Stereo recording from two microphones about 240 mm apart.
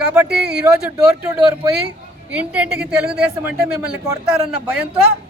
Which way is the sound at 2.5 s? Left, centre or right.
Centre.